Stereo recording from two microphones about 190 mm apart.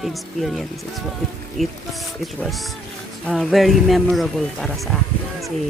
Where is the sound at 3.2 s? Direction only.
Centre (ahead or behind).